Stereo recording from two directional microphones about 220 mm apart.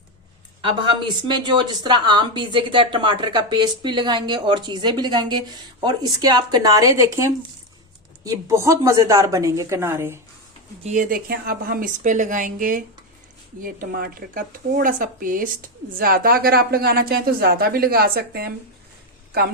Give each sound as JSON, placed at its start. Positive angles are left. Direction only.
{"t": 0.6, "sound": "a woman's voice", "side_deg": -20}
{"t": 10.8, "sound": "speech", "side_deg": -35}